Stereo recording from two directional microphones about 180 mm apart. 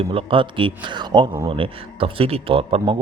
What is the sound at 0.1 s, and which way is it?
A man's voice, 30° right (ahead or behind).